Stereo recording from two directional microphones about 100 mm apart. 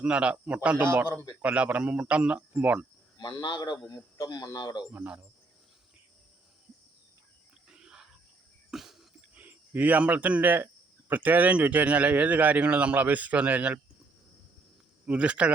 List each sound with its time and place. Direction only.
0.0 s speech: 10° right (ahead or behind)
3.2 s speech: 50° left (ahead or behind)
4.9 s speech: 10° right (ahead or behind)
7.7 s wild animals: 5° right (ahead or behind)
8.7 s cough: 5° right (ahead or behind)
9.3 s speech: 15° right (ahead or behind)
15.0 s speech: 15° right (ahead or behind)